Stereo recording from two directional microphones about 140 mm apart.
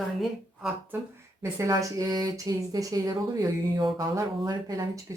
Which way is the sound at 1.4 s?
20° right (ahead or behind).